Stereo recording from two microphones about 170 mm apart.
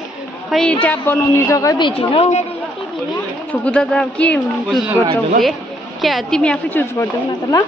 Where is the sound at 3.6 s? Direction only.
5° left (ahead or behind).